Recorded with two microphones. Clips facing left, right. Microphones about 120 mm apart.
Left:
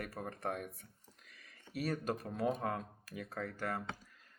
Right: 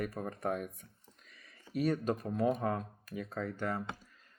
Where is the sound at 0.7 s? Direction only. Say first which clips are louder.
Right 1 dB; 35° left (ahead or behind).